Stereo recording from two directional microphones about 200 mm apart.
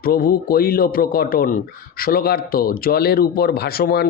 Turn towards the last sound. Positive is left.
turn(degrees=50)  # may be behind; listen again after turning